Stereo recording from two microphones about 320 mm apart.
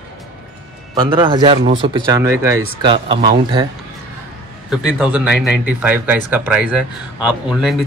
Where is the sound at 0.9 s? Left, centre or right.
Centre.